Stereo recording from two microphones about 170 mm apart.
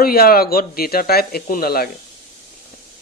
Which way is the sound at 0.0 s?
65° left (ahead or behind).